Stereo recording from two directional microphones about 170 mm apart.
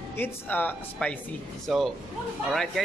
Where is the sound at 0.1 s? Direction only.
10° left (ahead or behind).